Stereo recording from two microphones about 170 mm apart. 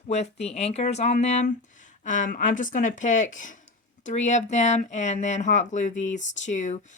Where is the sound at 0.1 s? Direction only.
40° left (ahead or behind).